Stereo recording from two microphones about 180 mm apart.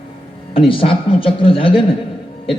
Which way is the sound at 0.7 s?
30° left (ahead or behind).